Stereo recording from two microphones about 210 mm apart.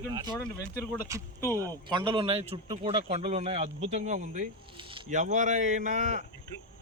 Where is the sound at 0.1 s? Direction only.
20° right (ahead or behind).